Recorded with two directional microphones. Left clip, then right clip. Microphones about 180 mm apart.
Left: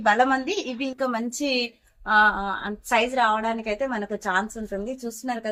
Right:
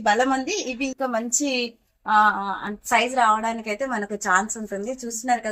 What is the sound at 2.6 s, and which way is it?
Speech, 60° right (ahead or behind).